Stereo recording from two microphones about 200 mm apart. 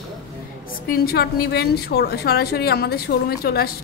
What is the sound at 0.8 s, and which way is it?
A woman's voice, 50° left (ahead or behind).